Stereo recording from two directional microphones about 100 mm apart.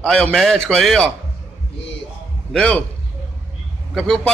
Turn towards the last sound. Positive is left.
turn(degrees=5)  # may be behind; listen again after turning